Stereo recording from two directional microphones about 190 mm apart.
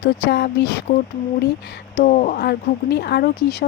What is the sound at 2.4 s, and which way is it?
Speech, 60° left (ahead or behind).